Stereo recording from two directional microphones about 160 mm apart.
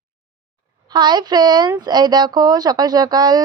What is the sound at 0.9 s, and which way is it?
Speech, 25° right (ahead or behind).